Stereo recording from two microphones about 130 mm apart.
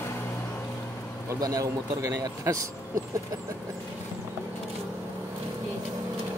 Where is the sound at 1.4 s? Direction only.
25° right (ahead or behind).